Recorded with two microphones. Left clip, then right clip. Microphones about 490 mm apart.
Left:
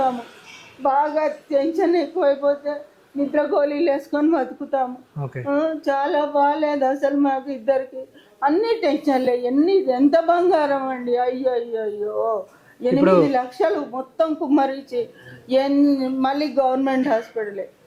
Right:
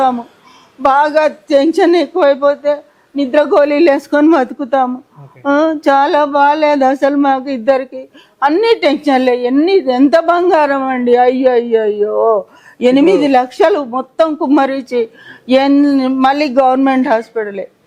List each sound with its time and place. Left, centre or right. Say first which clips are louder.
0.8 s a woman's voice: right 9 dB; right
5.5 s a sound: right 10 dB; right
8.4 s a woman's voice: right 9 dB; right
15.4 s a woman's voice: right 8 dB; right